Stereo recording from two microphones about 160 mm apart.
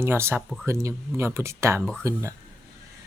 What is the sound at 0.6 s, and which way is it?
Speech, 15° right (ahead or behind).